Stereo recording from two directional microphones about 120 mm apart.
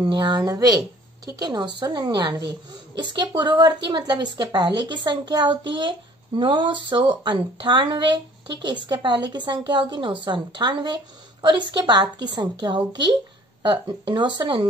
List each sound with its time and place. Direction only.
0.0 s a woman's voice: 40° right (ahead or behind)